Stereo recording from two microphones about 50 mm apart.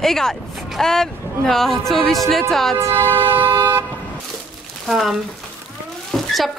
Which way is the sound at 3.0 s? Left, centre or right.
Right.